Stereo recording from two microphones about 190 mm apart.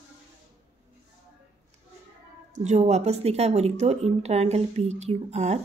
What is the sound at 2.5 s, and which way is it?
A woman's voice, 35° right (ahead or behind).